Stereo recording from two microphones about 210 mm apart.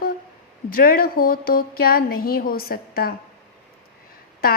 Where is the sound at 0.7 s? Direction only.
45° left (ahead or behind).